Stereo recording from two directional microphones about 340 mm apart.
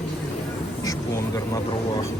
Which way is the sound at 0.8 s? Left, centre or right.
Centre.